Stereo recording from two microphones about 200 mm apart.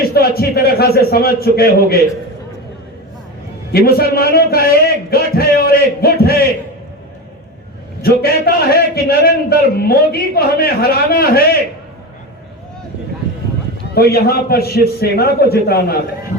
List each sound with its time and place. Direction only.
0.0 s a man's voice: 50° left (ahead or behind)
3.7 s a man's voice: 50° left (ahead or behind)
8.0 s a man's voice: 50° left (ahead or behind)
13.9 s a man's voice: 50° left (ahead or behind)